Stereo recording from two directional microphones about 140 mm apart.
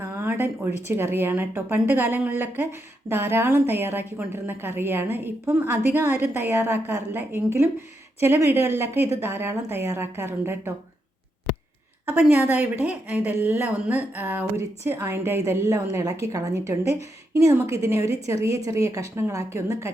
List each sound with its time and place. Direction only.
0.0 s a woman's voice: 15° right (ahead or behind)
12.1 s a woman's voice: 15° right (ahead or behind)